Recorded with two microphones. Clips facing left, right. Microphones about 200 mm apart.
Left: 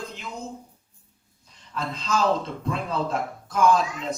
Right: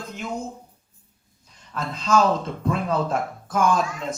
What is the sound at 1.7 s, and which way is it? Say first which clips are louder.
Speech: right 5 dB; 50° right (ahead or behind).